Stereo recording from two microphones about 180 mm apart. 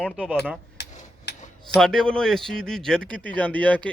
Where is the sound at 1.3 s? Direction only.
70° left (ahead or behind).